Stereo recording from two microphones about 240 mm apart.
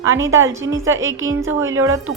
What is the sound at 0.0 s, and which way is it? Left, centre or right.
Speech, right.